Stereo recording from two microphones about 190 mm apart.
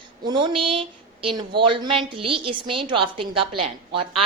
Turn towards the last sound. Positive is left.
turn(degrees=-30)  # may be behind; listen again after turning